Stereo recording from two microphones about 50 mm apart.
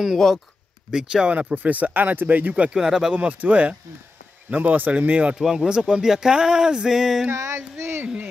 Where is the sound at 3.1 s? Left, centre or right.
Right.